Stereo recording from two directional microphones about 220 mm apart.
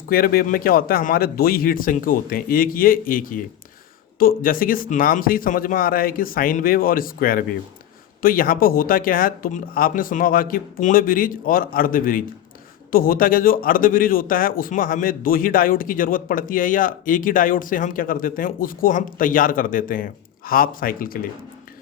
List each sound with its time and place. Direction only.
0.1 s a man's voice: 40° left (ahead or behind)